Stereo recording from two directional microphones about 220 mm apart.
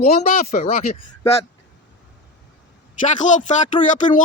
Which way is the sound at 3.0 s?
35° left (ahead or behind).